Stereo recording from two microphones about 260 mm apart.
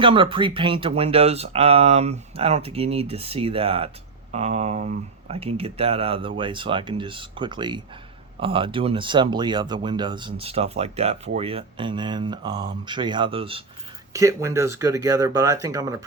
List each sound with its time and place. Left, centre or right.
0.0 s speech: centre